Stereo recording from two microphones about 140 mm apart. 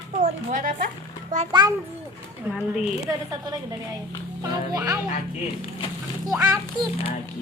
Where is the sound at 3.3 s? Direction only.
25° right (ahead or behind).